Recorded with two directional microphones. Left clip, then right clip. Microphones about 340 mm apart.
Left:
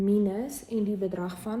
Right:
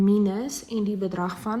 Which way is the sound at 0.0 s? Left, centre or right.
Right.